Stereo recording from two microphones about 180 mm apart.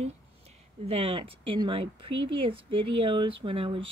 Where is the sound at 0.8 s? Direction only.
35° right (ahead or behind).